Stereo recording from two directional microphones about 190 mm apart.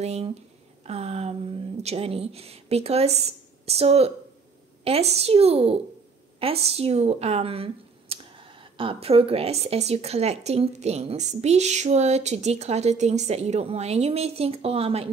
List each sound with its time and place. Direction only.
0.0 s speech: 35° right (ahead or behind)